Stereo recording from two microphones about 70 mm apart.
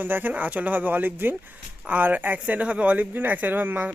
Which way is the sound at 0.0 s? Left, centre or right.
Right.